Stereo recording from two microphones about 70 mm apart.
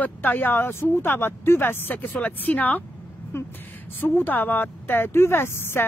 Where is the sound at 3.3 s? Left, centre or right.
Left.